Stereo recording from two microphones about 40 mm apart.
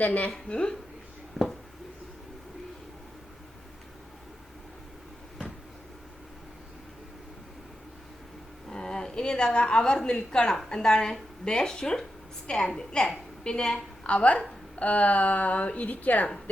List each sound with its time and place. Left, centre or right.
0.0 s a woman's voice: left
0.3 s a woman's voice: left
1.4 s a sound: centre
8.7 s a woman's voice: centre; by 16.3 s left